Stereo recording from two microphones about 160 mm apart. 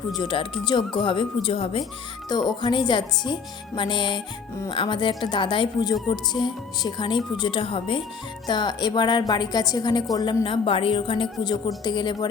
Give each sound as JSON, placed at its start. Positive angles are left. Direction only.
{"t": 0.2, "sound": "a woman's voice", "side_deg": 30}